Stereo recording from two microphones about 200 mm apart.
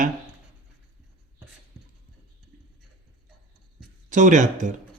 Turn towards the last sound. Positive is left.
turn(degrees=-40)  # may be behind; listen again after turning